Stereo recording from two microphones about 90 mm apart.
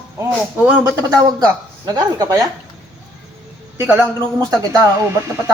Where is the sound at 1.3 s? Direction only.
45° right (ahead or behind).